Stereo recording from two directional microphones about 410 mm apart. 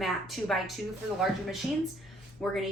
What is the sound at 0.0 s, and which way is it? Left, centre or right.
Speech, centre.